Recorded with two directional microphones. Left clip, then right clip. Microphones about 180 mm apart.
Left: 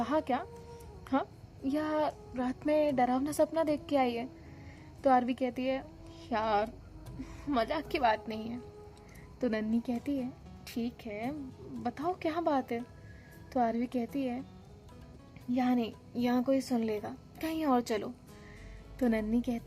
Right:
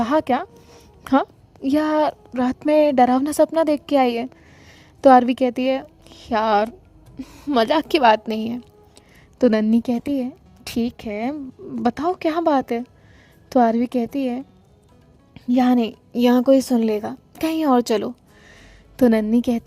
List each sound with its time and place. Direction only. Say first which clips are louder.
0.0 s a woman's voice: right 12 dB; 60° right (ahead or behind)
7.2 s a woman's voice: right 13 dB; 40° right (ahead or behind); by 14.4 s 55° right (ahead or behind)
15.5 s speech: right 13 dB; 80° right; by 19.6 s 55° right (ahead or behind)